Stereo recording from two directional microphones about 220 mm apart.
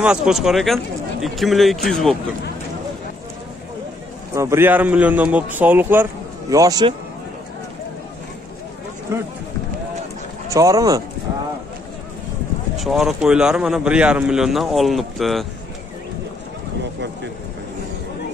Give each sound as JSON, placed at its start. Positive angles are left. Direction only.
{"t": 0.0, "sound": "a man's voice", "side_deg": -5}
{"t": 4.3, "sound": "a man's voice", "side_deg": -15}
{"t": 10.5, "sound": "a man's voice", "side_deg": -15}
{"t": 12.7, "sound": "a man's voice", "side_deg": 0}